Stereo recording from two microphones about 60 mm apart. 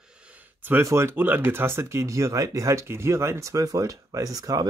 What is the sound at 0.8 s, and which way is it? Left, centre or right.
Speech, right.